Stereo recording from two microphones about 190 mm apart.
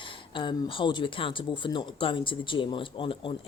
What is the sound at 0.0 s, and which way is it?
Speech, 25° left (ahead or behind).